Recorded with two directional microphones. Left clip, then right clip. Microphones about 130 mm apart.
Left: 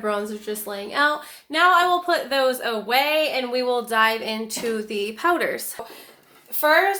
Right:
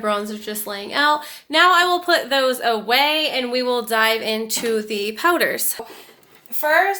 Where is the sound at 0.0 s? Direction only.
65° right (ahead or behind).